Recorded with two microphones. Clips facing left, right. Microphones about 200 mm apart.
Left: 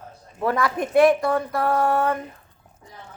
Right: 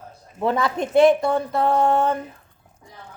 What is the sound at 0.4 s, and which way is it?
Speech, 25° right (ahead or behind).